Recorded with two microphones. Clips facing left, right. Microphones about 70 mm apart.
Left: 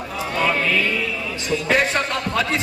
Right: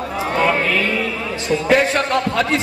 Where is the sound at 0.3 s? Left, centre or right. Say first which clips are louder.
Right 3 dB; right.